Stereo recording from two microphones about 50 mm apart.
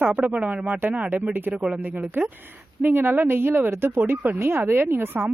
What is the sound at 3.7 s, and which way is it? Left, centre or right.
Speech, right.